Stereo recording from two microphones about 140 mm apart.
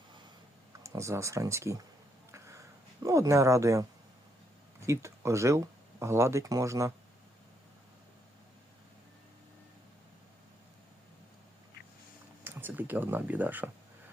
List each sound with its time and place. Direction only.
0.8 s speech: 20° right (ahead or behind)
3.0 s speech: 20° right (ahead or behind)
4.9 s speech: 20° right (ahead or behind)
12.5 s speech: 15° right (ahead or behind)